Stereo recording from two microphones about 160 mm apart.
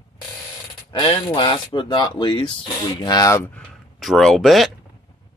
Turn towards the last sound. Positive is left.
turn(degrees=0)  # may be behind; listen again after turning